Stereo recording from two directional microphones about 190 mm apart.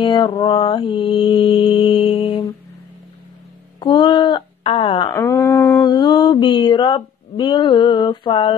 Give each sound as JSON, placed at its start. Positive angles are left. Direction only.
{"t": 0.0, "sound": "mantra", "side_deg": 25}
{"t": 3.8, "sound": "a sound", "side_deg": 25}
{"t": 5.1, "sound": "mantra", "side_deg": 15}